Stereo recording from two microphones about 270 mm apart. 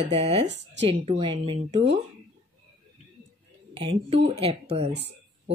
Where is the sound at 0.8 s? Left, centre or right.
Centre.